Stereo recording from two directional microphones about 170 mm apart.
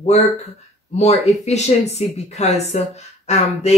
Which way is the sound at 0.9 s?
40° left (ahead or behind).